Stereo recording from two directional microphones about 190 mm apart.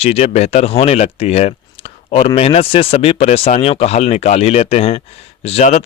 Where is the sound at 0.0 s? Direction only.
35° left (ahead or behind).